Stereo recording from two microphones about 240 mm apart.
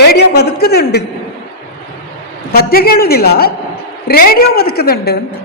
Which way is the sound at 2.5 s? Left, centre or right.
Left.